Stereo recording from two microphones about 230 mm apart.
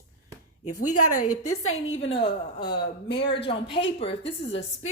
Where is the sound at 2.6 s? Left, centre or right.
Left.